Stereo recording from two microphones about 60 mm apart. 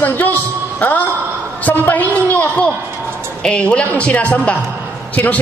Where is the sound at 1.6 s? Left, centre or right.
Left.